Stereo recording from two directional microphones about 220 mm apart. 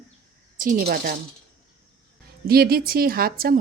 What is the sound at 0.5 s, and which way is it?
Speech, 40° right (ahead or behind).